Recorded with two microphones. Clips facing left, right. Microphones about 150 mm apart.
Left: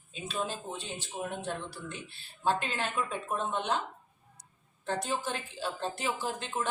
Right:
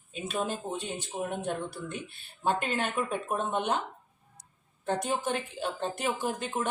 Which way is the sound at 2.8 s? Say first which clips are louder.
Right 3 dB; 55° right (ahead or behind).